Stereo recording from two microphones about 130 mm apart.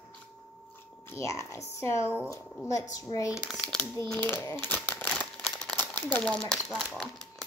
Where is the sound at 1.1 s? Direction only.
25° left (ahead or behind).